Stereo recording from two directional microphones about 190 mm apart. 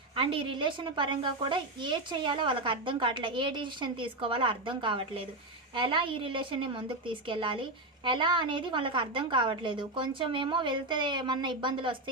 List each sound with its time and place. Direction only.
0.2 s a woman's voice: 25° right (ahead or behind)